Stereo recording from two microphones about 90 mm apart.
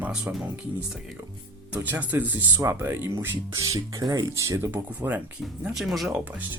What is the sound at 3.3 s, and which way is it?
Speech, 45° right (ahead or behind).